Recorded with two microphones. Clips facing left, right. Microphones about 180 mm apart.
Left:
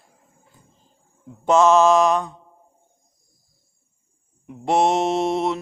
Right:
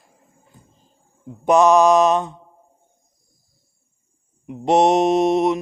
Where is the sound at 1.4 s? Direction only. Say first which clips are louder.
Right 1 dB; 15° right (ahead or behind).